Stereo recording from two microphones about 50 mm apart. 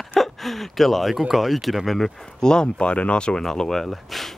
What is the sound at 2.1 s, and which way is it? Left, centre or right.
Speech, centre.